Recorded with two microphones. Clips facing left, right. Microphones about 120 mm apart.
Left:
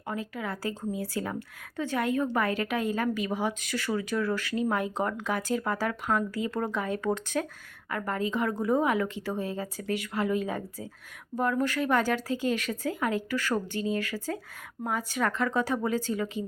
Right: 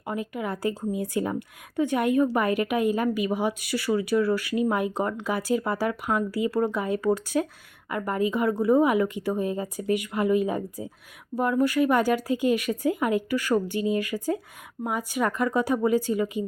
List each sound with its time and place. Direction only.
0.0 s a woman's voice: 15° right (ahead or behind)